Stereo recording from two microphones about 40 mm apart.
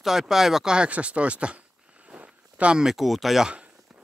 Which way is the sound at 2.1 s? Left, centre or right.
Right.